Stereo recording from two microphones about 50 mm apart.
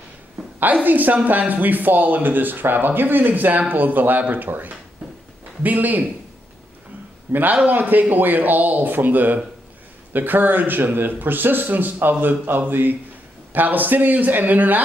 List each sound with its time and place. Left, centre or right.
0.7 s speech: right
7.3 s speech: right